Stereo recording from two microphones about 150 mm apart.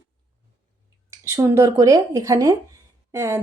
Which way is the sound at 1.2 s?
20° right (ahead or behind).